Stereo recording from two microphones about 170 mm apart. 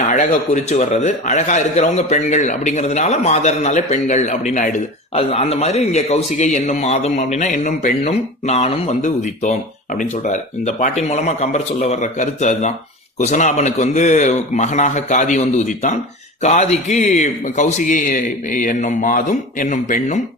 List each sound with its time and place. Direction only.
0.1 s a man's voice: 45° left (ahead or behind)